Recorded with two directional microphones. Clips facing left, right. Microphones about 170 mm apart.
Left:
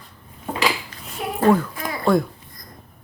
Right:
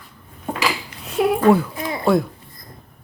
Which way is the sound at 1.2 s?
90° right.